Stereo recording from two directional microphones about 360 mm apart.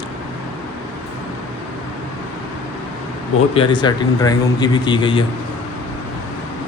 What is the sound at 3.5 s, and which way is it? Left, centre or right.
Speech, centre.